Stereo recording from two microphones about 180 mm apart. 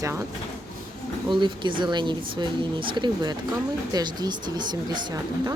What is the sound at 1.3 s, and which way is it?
Speech, 25° right (ahead or behind).